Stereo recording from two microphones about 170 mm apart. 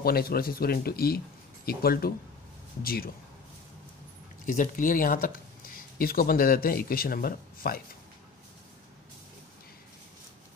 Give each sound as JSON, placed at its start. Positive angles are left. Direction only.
{"t": 0.0, "sound": "speech", "side_deg": 65}
{"t": 4.5, "sound": "speech", "side_deg": 50}